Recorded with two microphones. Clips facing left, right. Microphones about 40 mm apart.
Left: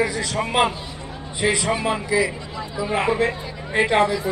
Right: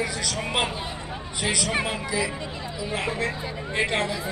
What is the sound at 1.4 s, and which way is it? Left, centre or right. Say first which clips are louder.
Speech: left 5 dB; left.